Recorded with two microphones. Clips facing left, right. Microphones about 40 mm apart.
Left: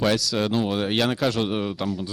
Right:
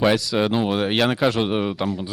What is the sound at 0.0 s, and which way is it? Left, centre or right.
Speech, centre.